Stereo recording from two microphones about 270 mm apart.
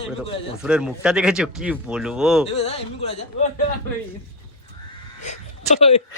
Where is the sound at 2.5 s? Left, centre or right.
Left.